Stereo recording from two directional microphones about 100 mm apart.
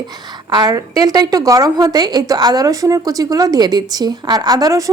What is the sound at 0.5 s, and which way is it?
A woman's voice, 40° right (ahead or behind).